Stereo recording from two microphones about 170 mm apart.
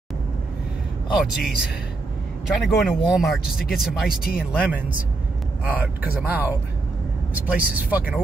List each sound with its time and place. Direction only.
1.1 s speech: 5° right (ahead or behind)
7.4 s speech: 10° right (ahead or behind)